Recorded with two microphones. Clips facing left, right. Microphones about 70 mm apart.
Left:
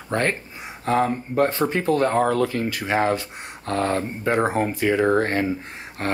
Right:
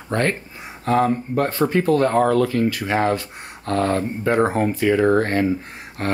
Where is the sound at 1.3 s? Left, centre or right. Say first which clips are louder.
Right 1 dB; left.